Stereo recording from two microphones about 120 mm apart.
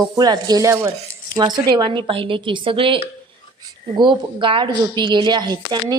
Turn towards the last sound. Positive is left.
turn(degrees=-35)  # may be behind; listen again after turning